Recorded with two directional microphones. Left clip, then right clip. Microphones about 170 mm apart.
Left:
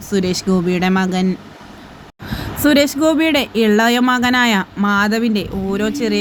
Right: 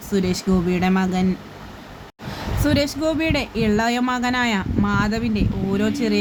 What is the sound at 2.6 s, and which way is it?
Speech, 15° left (ahead or behind).